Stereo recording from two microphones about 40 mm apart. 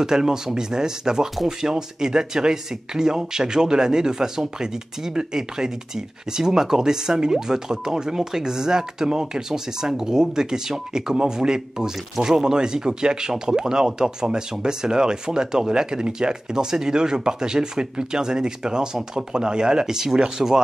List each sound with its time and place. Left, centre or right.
0.0 s speech: centre